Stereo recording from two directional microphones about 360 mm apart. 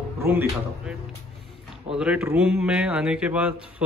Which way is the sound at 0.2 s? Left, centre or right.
Centre.